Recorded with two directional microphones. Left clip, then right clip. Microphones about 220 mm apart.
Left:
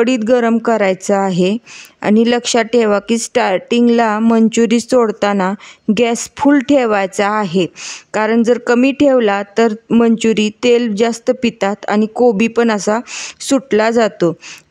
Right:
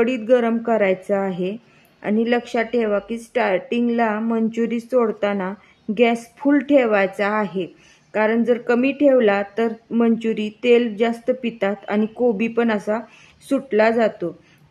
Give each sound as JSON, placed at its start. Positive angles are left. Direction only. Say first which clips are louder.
{"t": 0.0, "sound": "speech", "louder": "left 5 dB", "side_deg": 45}